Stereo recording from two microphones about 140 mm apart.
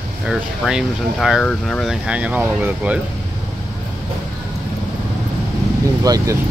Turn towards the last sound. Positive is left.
turn(degrees=-25)  # may be behind; listen again after turning